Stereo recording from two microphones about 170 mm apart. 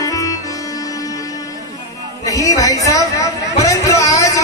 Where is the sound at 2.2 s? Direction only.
20° left (ahead or behind).